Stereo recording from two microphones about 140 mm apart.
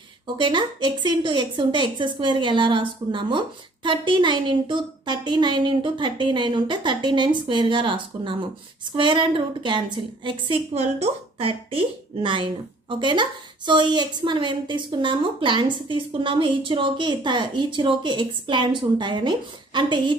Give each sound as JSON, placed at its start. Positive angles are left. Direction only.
{"t": 0.4, "sound": "speech", "side_deg": -35}